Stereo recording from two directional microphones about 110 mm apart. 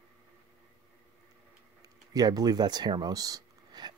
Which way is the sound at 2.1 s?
35° right (ahead or behind).